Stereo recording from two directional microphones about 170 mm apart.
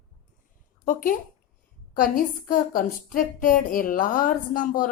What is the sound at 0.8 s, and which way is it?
A woman's voice, 55° left (ahead or behind).